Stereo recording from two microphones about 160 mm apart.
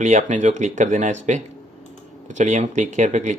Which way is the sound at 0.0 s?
50° right (ahead or behind).